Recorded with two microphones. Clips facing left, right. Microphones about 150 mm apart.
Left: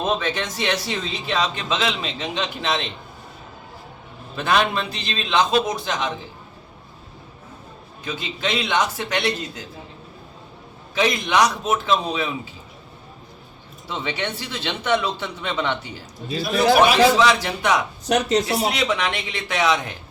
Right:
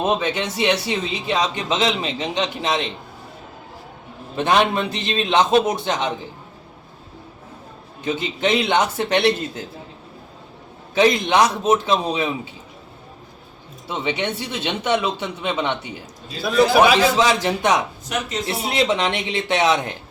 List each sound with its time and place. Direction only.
0.0 s a man's voice: 15° right (ahead or behind)
4.4 s a man's voice: 20° right (ahead or behind)
8.0 s a man's voice: 25° right (ahead or behind)
10.9 s a man's voice: 25° right (ahead or behind)
13.8 s a man's voice: 20° right (ahead or behind)
17.2 s a man's voice: 25° right (ahead or behind)
18.0 s speech: 75° left (ahead or behind)
18.8 s a man's voice: 25° right (ahead or behind)